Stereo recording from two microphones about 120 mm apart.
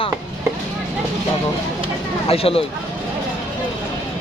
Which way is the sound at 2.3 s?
55° left (ahead or behind).